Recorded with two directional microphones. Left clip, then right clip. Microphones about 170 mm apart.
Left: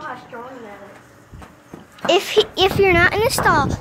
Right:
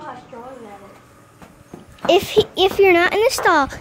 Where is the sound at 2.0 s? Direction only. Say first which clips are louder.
Right 1 dB; 30° right (ahead or behind).